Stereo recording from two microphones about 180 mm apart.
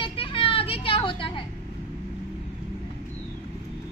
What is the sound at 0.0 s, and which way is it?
Vehicle, 30° left (ahead or behind).